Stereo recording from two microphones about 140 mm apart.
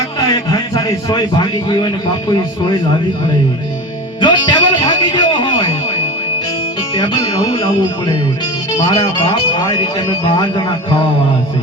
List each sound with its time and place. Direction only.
0.5 s a man's voice: 30° left (ahead or behind)
4.2 s music: 35° left (ahead or behind)
8.8 s a man's voice: 40° left (ahead or behind)